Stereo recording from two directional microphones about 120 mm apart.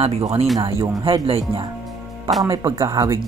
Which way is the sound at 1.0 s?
50° right (ahead or behind).